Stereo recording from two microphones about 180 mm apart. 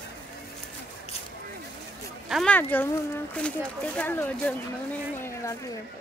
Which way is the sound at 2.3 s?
5° left (ahead or behind).